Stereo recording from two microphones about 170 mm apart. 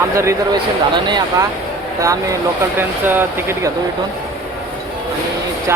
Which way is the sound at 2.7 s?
10° right (ahead or behind).